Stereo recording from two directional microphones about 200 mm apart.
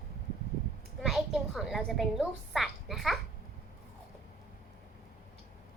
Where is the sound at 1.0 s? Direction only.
Centre (ahead or behind).